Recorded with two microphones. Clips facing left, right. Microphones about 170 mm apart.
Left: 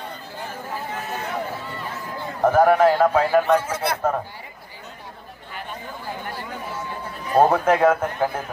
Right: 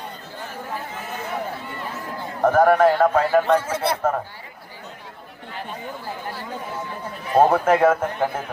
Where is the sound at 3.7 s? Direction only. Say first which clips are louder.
Right 2 dB; 30° right (ahead or behind).